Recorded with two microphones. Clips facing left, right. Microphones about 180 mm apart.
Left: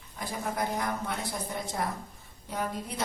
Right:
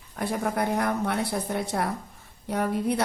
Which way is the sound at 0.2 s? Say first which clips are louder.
Right 6 dB; 65° right (ahead or behind).